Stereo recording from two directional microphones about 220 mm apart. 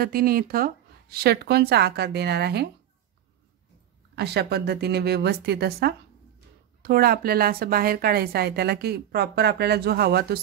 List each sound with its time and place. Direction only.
0.0 s a woman's voice: 40° right (ahead or behind)
4.1 s a woman's voice: 50° right (ahead or behind)